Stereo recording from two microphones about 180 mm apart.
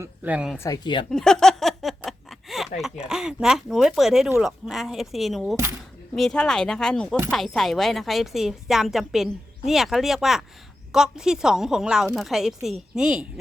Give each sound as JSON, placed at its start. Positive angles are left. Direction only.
{"t": 0.0, "sound": "speech", "side_deg": -10}
{"t": 0.6, "sound": "a woman's voice", "side_deg": 25}
{"t": 1.1, "sound": "a sound", "side_deg": 5}
{"t": 2.8, "sound": "a woman's voice", "side_deg": -5}